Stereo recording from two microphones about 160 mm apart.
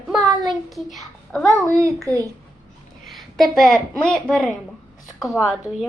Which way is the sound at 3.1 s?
Centre (ahead or behind).